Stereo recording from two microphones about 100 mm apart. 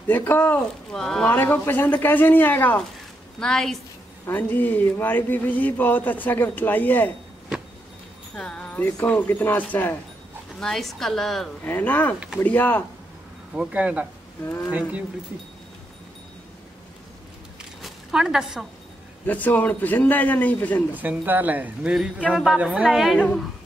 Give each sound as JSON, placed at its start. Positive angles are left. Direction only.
{"t": 0.0, "sound": "speech", "side_deg": 20}
{"t": 0.9, "sound": "a woman's voice", "side_deg": 5}
{"t": 1.3, "sound": "speech", "side_deg": 20}
{"t": 3.3, "sound": "a woman's voice", "side_deg": 5}
{"t": 4.3, "sound": "speech", "side_deg": 20}
{"t": 8.4, "sound": "wind chime", "side_deg": 10}
{"t": 9.0, "sound": "speech", "side_deg": 20}
{"t": 10.6, "sound": "a woman's voice", "side_deg": 5}
{"t": 11.6, "sound": "speech", "side_deg": 15}
{"t": 13.6, "sound": "speech", "side_deg": -15}
{"t": 17.6, "sound": "a sound", "side_deg": -5}
{"t": 19.2, "sound": "speech", "side_deg": 15}
{"t": 20.9, "sound": "speech", "side_deg": -15}
{"t": 23.1, "sound": "speech", "side_deg": 10}